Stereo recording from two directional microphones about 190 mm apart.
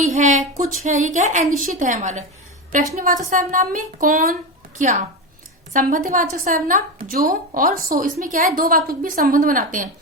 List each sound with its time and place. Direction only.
0.0 s a woman's voice: 40° right (ahead or behind)